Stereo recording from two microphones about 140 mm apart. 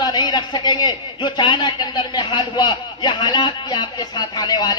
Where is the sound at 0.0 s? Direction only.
30° left (ahead or behind).